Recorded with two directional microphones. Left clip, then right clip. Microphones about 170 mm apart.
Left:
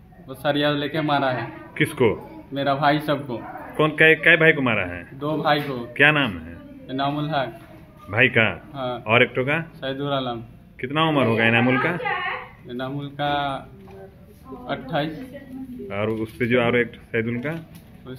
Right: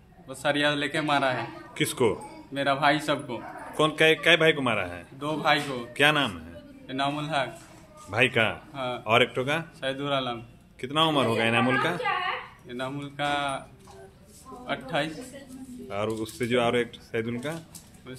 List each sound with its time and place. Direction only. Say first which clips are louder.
0.3 s a man's voice: left 3 dB; 10° right (ahead or behind)
8.7 s a man's voice: left 4 dB; 10° right (ahead or behind)
9.0 s a man's voice: left 4 dB; 20° right (ahead or behind)
12.6 s a man's voice: left 5 dB; 10° right (ahead or behind)
14.7 s a man's voice: left 3 dB; 10° right (ahead or behind)